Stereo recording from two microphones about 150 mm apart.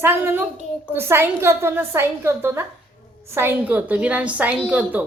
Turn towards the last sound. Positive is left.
turn(degrees=-10)  # may be behind; listen again after turning